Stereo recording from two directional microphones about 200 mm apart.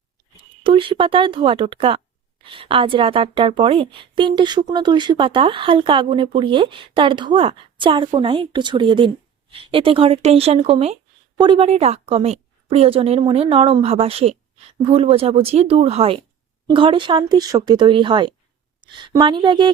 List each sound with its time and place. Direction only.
0.3 s speech: 25° right (ahead or behind)